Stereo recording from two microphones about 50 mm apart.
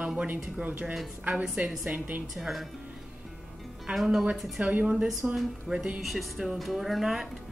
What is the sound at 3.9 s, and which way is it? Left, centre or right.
Speech, centre.